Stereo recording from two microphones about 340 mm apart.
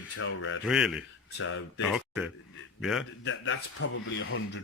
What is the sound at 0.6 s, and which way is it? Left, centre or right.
Speech, centre.